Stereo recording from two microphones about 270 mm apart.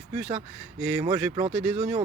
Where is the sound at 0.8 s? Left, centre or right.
Centre.